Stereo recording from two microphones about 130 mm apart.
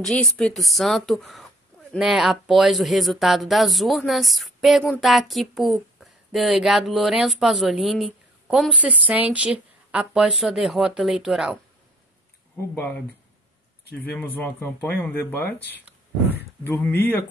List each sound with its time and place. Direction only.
0.0 s speech: 5° left (ahead or behind)
14.1 s speech: 15° left (ahead or behind)